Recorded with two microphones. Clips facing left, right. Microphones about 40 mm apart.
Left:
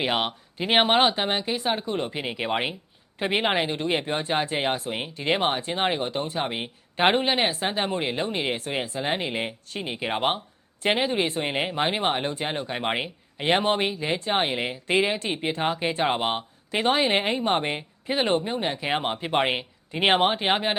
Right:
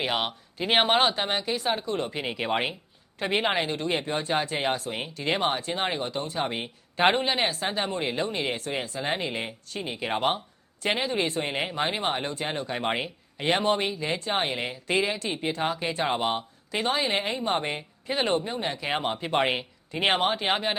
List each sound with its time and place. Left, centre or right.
0.0 s speech: centre